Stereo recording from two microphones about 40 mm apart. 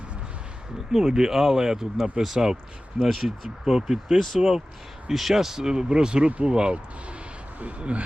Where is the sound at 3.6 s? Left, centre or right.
Centre.